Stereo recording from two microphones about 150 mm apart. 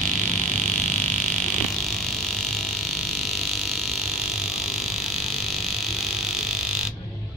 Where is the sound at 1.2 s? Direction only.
Centre (ahead or behind).